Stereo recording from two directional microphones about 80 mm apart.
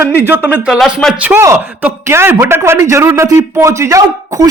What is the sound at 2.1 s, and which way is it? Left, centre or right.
Speech, right.